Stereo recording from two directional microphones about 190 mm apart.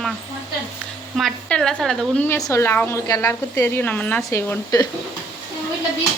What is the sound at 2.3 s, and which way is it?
Speech, 15° left (ahead or behind).